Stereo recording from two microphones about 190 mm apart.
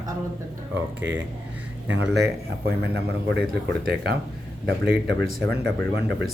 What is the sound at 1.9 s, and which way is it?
A man's voice, 75° right (ahead or behind).